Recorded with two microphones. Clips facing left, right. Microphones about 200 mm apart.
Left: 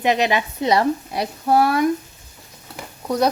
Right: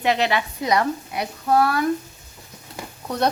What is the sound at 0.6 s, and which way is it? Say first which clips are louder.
Speech: left 4 dB; 30° left (ahead or behind).